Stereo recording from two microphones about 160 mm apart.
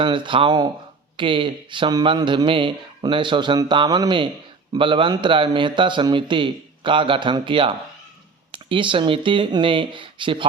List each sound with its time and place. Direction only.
0.0 s a man's voice: 30° right (ahead or behind)